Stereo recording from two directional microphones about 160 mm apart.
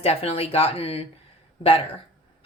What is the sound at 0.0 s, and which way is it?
A woman's voice, 40° left (ahead or behind).